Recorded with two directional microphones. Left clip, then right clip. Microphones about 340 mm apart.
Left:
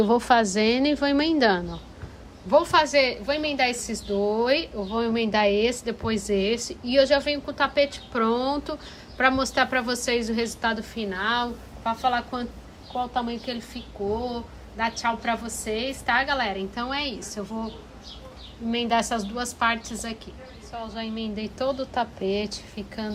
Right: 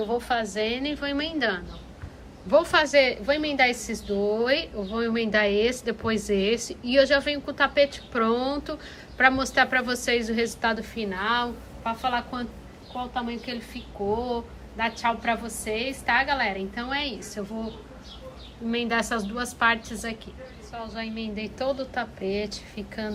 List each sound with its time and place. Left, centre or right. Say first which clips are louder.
0.1 s a woman's voice: left 6 dB; centre
18.7 s a woman's voice: left 2 dB; centre